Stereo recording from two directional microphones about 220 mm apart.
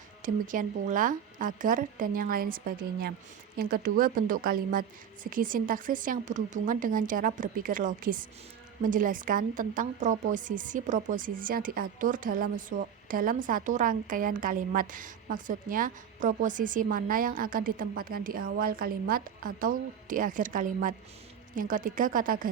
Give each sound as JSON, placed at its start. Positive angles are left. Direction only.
{"t": 0.2, "sound": "a woman's voice", "side_deg": -35}